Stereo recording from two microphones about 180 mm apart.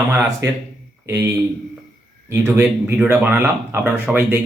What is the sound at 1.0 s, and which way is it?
Speech, 15° right (ahead or behind).